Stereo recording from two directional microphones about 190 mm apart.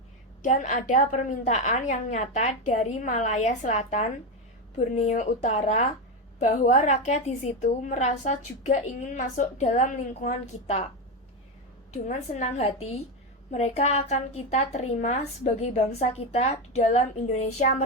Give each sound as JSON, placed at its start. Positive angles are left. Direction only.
{"t": 0.4, "sound": "a woman's voice", "side_deg": 40}
{"t": 12.0, "sound": "a woman's voice", "side_deg": 35}